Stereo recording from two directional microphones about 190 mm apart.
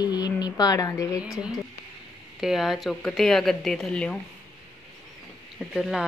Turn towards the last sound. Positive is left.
turn(degrees=0)  # may be behind; listen again after turning